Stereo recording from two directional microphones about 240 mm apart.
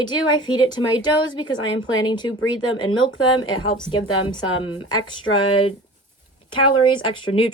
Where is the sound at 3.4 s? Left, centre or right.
Centre.